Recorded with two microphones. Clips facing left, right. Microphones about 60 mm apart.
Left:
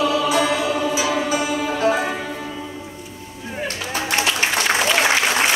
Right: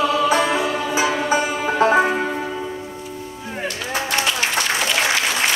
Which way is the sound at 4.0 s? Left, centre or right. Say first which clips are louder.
Left 1 dB; left.